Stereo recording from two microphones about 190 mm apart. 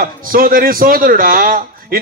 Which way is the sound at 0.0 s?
50° right (ahead or behind).